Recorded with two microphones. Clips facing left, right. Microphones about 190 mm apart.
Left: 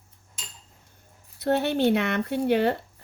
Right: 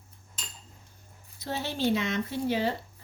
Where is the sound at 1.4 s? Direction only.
60° left (ahead or behind).